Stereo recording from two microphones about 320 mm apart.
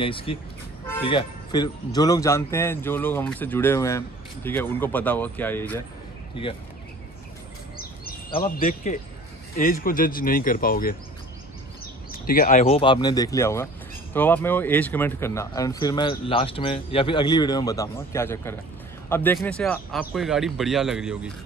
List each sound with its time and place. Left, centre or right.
0.0 s speech: centre
7.7 s a sound: left
8.3 s speech: centre